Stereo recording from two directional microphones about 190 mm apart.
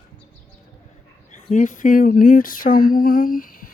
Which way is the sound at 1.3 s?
40° left (ahead or behind).